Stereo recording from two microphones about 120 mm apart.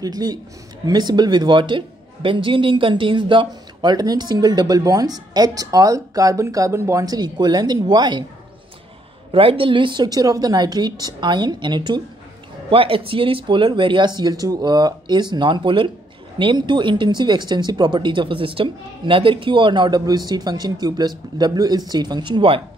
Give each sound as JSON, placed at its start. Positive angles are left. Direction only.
{"t": 0.0, "sound": "a man's voice", "side_deg": -35}
{"t": 9.3, "sound": "speech", "side_deg": -50}
{"t": 10.0, "sound": "a man's voice", "side_deg": -30}
{"t": 12.6, "sound": "a man's voice", "side_deg": -50}